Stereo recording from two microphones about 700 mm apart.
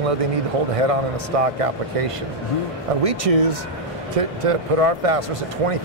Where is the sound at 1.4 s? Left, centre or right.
Right.